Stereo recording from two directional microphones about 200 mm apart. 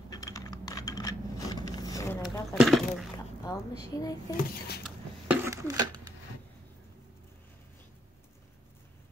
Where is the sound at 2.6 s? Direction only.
Centre (ahead or behind).